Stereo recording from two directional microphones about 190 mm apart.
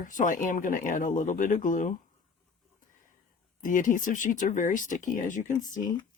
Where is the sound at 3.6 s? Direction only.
45° left (ahead or behind).